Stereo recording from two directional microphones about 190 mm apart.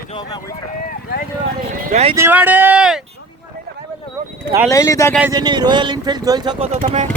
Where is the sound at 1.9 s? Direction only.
35° right (ahead or behind).